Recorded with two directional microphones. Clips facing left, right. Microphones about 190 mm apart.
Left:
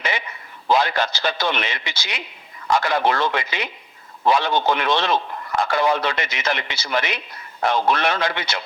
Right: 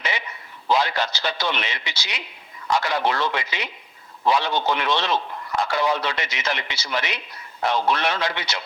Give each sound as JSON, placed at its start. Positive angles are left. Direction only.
{"t": 0.7, "sound": "a man's voice", "side_deg": 50}